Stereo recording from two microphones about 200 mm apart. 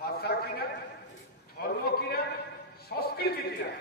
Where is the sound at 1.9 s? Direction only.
50° left (ahead or behind).